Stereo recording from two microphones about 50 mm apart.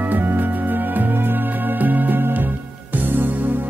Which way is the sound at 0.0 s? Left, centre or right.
Right.